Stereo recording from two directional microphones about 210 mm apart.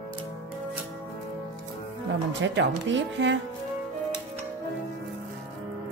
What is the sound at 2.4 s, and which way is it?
Speech, 60° right (ahead or behind).